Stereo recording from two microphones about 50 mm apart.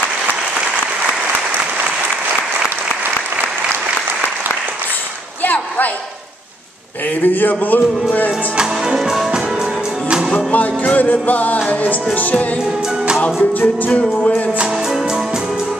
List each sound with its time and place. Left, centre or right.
5.4 s a sound: left
7.2 s speech: left
8.5 s music: centre
10.3 s music: left
11.0 s speech: left
13.2 s music: left